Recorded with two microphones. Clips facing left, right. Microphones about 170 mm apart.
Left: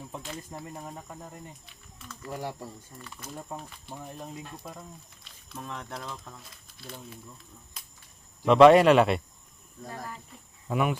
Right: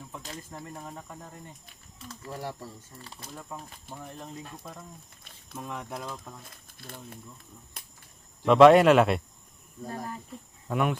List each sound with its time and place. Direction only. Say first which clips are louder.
0.5 s speech: left 1 dB; 10° left (ahead or behind)
2.3 s speech: left 2 dB; 15° left (ahead or behind)
3.0 s speech: left 1 dB; 35° right (ahead or behind)
3.8 s speech: even; 15° left (ahead or behind)
5.5 s speech: right 2 dB; 5° right (ahead or behind)
6.4 s speech: even; 55° right (ahead or behind)
7.8 s a sound: right 2 dB; 55° right (ahead or behind)
8.4 s speech: even; centre (ahead or behind)
10.7 s speech: even; centre (ahead or behind)